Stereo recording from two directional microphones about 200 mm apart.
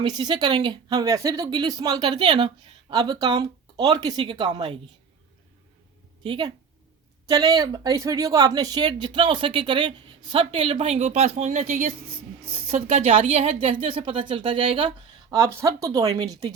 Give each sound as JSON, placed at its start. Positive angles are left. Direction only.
{"t": 0.0, "sound": "a woman's voice", "side_deg": -20}
{"t": 6.2, "sound": "a woman's voice", "side_deg": -25}
{"t": 15.4, "sound": "speech", "side_deg": -15}